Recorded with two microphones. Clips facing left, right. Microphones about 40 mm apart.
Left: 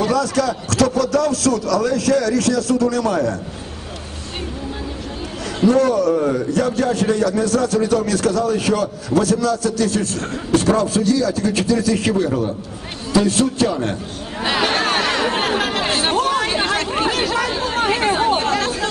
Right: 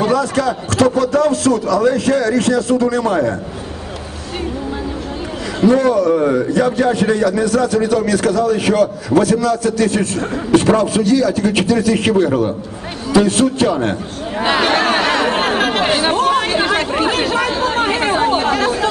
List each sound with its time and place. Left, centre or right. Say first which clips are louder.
0.0 s a man's voice: right 2 dB; right
5.7 s a man's voice: right 3 dB; right
14.6 s chatter: right 2 dB; right
15.9 s speech: right 4 dB; right
16.2 s chatter: right 3 dB; right
18.3 s chatter: right 3 dB; centre